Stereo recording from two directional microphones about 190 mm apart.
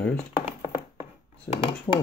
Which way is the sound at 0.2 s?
30° left (ahead or behind).